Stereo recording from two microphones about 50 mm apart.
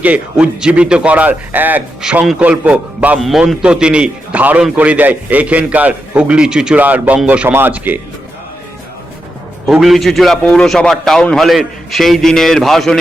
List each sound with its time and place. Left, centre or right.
0.0 s a man's voice: right
1.1 s a man's voice: right
2.0 s a man's voice: centre
2.4 s a man's voice: right
3.2 s a man's voice: centre
3.6 s a man's voice: centre
4.4 s a man's voice: right; by 6.7 s centre
6.7 s a man's voice: right
7.4 s speech: right
9.8 s a man's voice: centre
10.5 s a man's voice: centre